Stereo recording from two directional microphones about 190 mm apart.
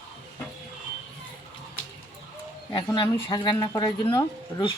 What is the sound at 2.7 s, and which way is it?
Speech, 25° left (ahead or behind).